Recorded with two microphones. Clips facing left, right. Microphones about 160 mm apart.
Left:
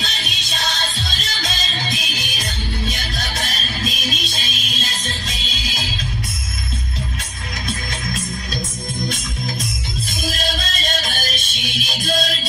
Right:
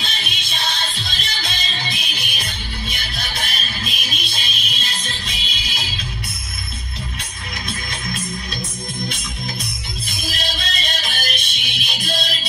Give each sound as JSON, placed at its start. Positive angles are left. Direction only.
{"t": 0.0, "sound": "music", "side_deg": 40}
{"t": 10.2, "sound": "music", "side_deg": 40}